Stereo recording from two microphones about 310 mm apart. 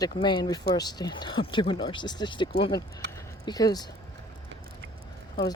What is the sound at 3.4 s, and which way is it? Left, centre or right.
Speech, centre.